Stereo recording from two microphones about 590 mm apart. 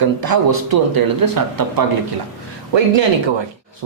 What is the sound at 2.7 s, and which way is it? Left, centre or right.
Speech, right.